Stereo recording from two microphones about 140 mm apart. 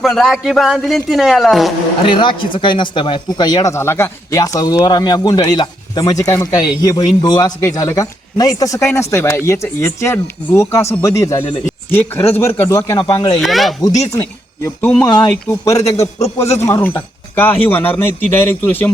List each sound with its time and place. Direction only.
0.0 s a man's voice: centre (ahead or behind)
2.0 s speech: 35° left (ahead or behind)
13.4 s a man's voice: centre (ahead or behind)
14.1 s speech: 20° left (ahead or behind)